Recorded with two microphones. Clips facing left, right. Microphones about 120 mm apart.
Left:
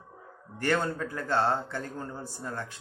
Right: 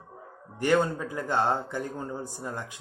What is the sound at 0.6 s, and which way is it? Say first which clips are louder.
Speech: right 4 dB; 15° right (ahead or behind).